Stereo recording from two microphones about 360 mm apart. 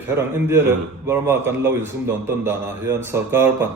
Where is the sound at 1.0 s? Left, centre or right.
Centre.